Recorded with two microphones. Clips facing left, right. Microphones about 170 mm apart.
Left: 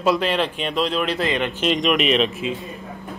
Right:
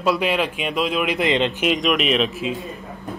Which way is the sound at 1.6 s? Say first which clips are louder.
Left 4 dB; centre (ahead or behind).